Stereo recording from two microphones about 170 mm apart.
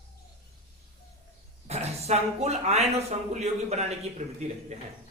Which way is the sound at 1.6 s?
40° right (ahead or behind).